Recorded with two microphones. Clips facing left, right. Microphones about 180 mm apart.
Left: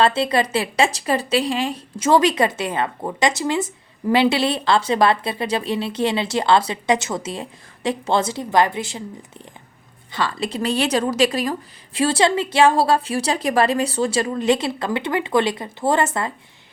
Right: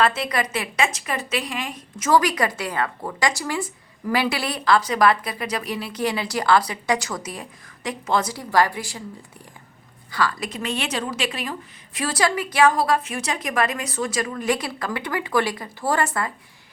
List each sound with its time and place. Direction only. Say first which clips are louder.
0.0 s a woman's voice: left 4 dB; 30° left (ahead or behind)
10.1 s a woman's voice: left 1 dB; 25° left (ahead or behind)
11.9 s a woman's voice: left 5 dB; 25° left (ahead or behind)